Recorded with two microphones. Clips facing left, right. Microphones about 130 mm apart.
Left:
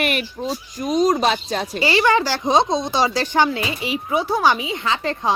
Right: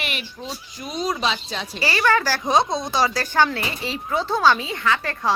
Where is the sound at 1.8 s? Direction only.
20° left (ahead or behind).